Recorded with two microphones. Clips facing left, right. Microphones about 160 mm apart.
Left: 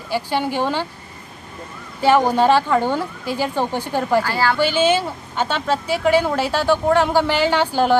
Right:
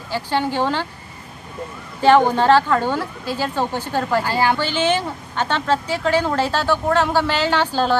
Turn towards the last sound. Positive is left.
turn(degrees=15)  # may be behind; listen again after turning